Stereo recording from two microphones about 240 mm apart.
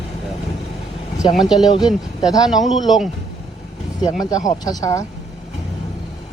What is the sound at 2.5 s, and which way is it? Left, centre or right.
Speech, centre.